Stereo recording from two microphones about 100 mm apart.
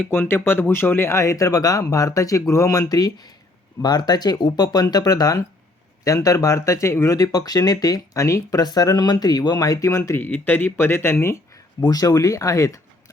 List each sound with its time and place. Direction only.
0.1 s speech: 25° left (ahead or behind)
10.2 s speech: 20° left (ahead or behind)
11.8 s speech: 40° left (ahead or behind)